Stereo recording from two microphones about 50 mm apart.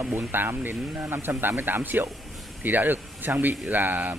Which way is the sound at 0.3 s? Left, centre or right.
Right.